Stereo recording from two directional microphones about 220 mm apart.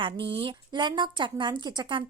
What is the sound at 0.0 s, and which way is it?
A woman's voice, 25° right (ahead or behind).